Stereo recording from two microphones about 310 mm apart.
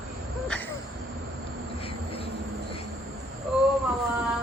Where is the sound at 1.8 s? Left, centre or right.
Centre.